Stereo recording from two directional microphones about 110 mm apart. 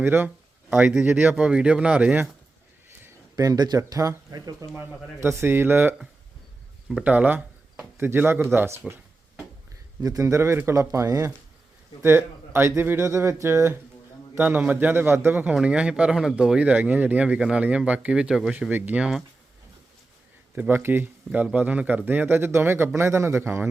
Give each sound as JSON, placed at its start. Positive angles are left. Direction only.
{"t": 0.0, "sound": "speech", "side_deg": -20}
{"t": 3.3, "sound": "speech", "side_deg": -35}
{"t": 5.2, "sound": "speech", "side_deg": -25}
{"t": 10.0, "sound": "speech", "side_deg": -30}
{"t": 18.5, "sound": "speech", "side_deg": -15}
{"t": 20.6, "sound": "speech", "side_deg": -20}